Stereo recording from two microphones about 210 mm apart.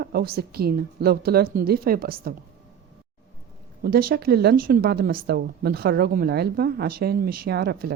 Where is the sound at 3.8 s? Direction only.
45° right (ahead or behind).